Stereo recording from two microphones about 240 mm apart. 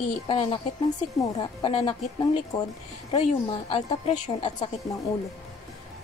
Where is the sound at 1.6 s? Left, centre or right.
Left.